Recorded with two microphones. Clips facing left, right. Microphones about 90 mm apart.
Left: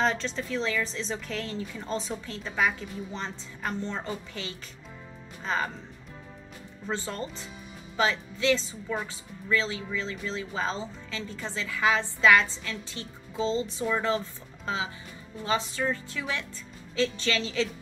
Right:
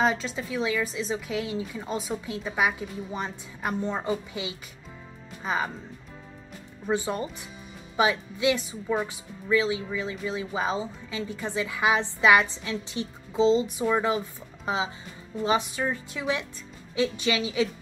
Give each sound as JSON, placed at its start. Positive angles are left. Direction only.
{"t": 0.0, "sound": "speech", "side_deg": -10}
{"t": 6.9, "sound": "speech", "side_deg": -15}